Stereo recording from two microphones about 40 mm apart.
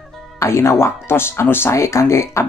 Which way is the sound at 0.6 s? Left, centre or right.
Left.